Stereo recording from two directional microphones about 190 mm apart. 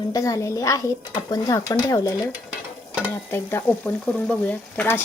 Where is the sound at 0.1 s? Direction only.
15° left (ahead or behind).